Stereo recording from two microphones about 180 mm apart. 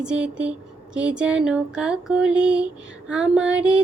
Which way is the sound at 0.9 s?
5° right (ahead or behind).